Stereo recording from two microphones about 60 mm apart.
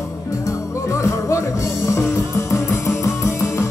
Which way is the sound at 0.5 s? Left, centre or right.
Left.